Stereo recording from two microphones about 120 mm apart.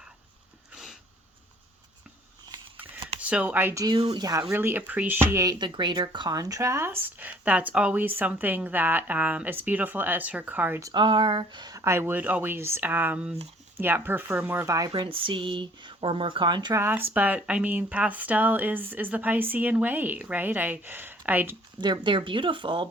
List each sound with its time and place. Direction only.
3.2 s speech: 10° right (ahead or behind)
3.8 s speech: 45° right (ahead or behind)
4.5 s speech: 15° right (ahead or behind)
5.5 s speech: 40° right (ahead or behind); by 10.8 s 15° right (ahead or behind)
10.9 s speech: 45° right (ahead or behind)
11.8 s speech: 20° right (ahead or behind)
14.8 s speech: 45° right (ahead or behind)
16.7 s speech: 20° right (ahead or behind)
21.8 s speech: 40° right (ahead or behind)